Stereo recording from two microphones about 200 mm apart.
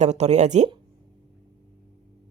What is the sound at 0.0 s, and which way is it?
Speech, 35° right (ahead or behind).